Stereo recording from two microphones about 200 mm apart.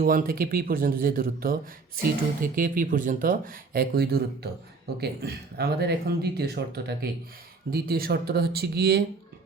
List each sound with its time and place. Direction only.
0.0 s speech: 45° right (ahead or behind)